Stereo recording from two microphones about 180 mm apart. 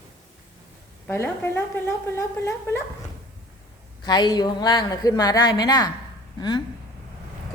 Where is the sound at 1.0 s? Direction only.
15° left (ahead or behind).